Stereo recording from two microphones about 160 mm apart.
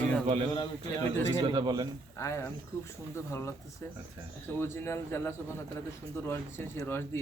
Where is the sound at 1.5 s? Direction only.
25° right (ahead or behind).